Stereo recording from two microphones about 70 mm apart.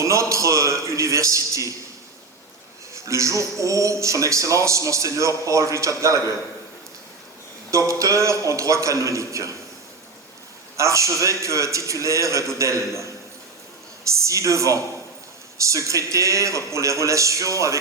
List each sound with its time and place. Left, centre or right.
0.0 s speech: right
2.9 s speech: right
7.7 s speech: right
10.8 s speech: right